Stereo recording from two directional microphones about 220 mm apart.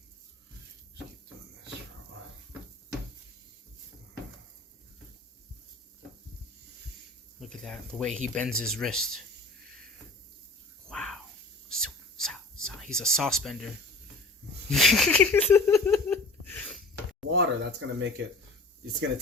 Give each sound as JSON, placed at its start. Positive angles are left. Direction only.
{"t": 7.6, "sound": "speech", "side_deg": 0}
{"t": 10.8, "sound": "a sound", "side_deg": 0}
{"t": 11.7, "sound": "whispering", "side_deg": 0}
{"t": 12.9, "sound": "speech", "side_deg": 5}
{"t": 14.7, "sound": "a sound", "side_deg": 0}
{"t": 17.2, "sound": "speech", "side_deg": -55}